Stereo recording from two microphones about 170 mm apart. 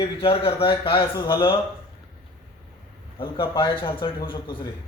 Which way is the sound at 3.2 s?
30° left (ahead or behind).